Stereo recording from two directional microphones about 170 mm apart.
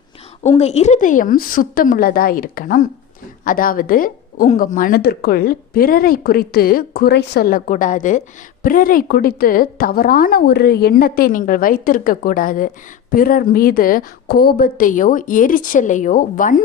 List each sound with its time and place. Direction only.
0.4 s a woman's voice: 40° left (ahead or behind)